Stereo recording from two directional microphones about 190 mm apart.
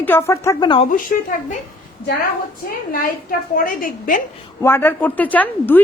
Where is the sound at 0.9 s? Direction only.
45° left (ahead or behind).